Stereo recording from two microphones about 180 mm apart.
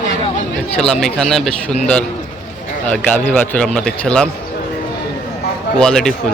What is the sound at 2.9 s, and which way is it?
Speech, 10° left (ahead or behind).